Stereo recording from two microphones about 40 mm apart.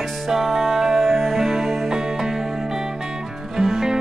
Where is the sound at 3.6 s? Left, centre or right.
Centre.